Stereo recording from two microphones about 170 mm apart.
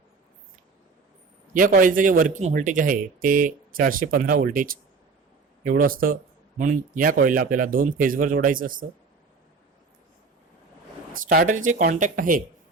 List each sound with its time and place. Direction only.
1.5 s speech: 55° right (ahead or behind)
11.3 s speech: 55° right (ahead or behind)